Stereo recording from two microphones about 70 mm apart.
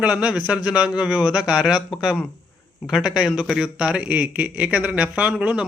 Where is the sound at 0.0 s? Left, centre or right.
Centre.